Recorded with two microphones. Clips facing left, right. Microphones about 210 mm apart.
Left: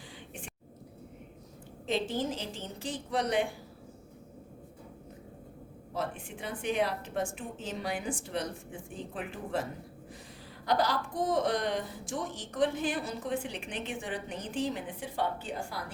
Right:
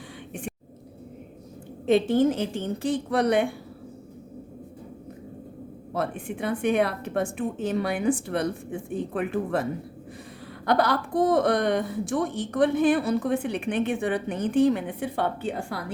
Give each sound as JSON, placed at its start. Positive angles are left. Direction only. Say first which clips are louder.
{"t": 1.9, "sound": "a woman's voice", "louder": "right 11 dB", "side_deg": -60}
{"t": 5.9, "sound": "a woman's voice", "louder": "right 7 dB", "side_deg": -60}
{"t": 10.7, "sound": "a woman's voice", "louder": "right 6 dB", "side_deg": -60}